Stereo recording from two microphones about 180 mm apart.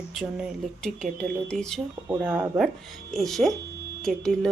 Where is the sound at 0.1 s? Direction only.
Centre (ahead or behind).